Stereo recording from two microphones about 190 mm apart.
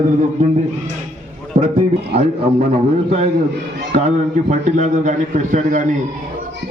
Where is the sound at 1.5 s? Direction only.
40° right (ahead or behind).